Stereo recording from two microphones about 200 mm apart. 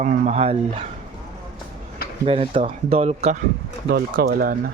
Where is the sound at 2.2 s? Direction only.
25° right (ahead or behind).